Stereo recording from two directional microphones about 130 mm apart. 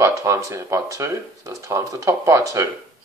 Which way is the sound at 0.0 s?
25° right (ahead or behind).